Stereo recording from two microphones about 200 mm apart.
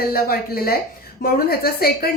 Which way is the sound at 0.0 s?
50° left (ahead or behind).